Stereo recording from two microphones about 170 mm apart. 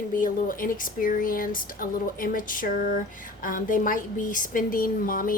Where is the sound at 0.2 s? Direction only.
55° left (ahead or behind).